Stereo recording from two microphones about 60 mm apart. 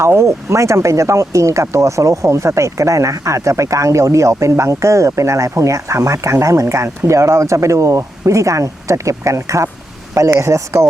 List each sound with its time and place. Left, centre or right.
0.0 s speech: right